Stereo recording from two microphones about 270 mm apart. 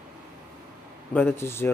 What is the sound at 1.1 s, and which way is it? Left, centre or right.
Speech, centre.